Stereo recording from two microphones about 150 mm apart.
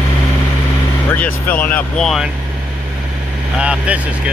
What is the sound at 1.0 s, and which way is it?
Speech, 10° left (ahead or behind).